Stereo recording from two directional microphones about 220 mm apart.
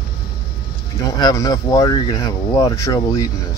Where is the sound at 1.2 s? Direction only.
15° left (ahead or behind).